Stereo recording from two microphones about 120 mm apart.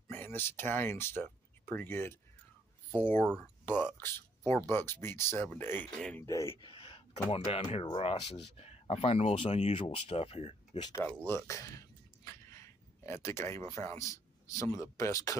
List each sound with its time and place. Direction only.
0.1 s speech: 15° left (ahead or behind)
3.7 s a man's voice: 35° right (ahead or behind)
4.6 s speech: 20° left (ahead or behind)
5.9 s speech: 5° left (ahead or behind)
6.2 s speech: 25° left (ahead or behind)
6.6 s speech: 50° left (ahead or behind)
10.8 s speech: 30° left (ahead or behind)
11.1 s speech: 20° left (ahead or behind)